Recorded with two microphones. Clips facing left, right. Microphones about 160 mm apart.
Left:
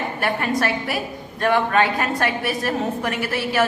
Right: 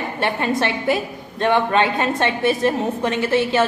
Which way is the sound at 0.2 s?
25° right (ahead or behind).